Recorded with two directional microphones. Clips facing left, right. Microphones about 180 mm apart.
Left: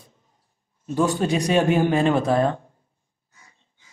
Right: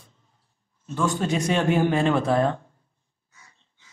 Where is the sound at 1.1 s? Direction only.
15° left (ahead or behind).